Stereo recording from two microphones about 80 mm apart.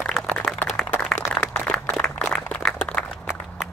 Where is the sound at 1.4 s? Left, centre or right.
Centre.